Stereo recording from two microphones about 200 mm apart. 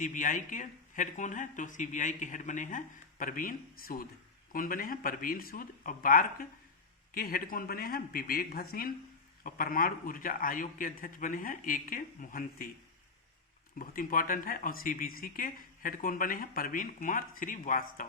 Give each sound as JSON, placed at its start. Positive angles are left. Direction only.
{"t": 0.0, "sound": "speech", "side_deg": 40}
{"t": 13.7, "sound": "speech", "side_deg": 45}